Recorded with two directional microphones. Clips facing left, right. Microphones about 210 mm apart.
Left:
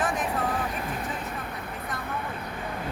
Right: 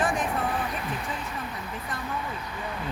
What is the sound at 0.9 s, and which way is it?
Speech, 55° left (ahead or behind).